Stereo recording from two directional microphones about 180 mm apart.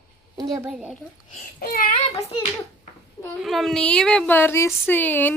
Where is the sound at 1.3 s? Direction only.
50° left (ahead or behind).